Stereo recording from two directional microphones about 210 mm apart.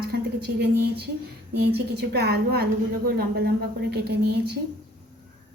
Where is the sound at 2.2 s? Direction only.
50° right (ahead or behind).